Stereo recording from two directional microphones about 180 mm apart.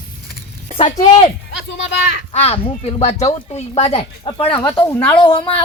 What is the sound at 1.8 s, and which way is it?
Speech, 80° left.